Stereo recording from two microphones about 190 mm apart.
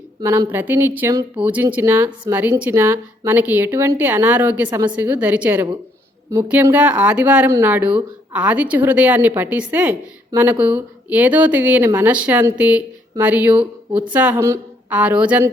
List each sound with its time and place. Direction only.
0.2 s speech: 20° right (ahead or behind)